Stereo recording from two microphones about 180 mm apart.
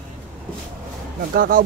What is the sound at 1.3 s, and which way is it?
Speech, 50° right (ahead or behind).